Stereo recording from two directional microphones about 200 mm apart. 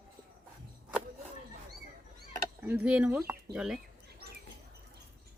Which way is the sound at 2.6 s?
10° right (ahead or behind).